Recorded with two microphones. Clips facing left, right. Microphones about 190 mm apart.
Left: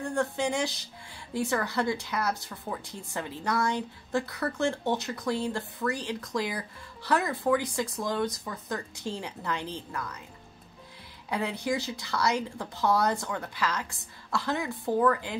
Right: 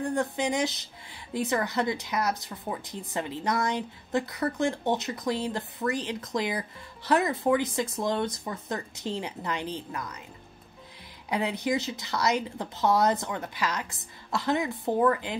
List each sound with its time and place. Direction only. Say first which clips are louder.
0.0 s speech: right 1 dB; 15° right (ahead or behind)
11.2 s speech: right 2 dB; 15° right (ahead or behind)